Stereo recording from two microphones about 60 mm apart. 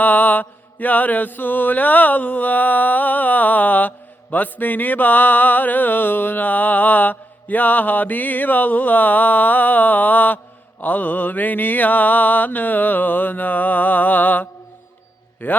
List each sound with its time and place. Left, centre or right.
0.0 s mantra: left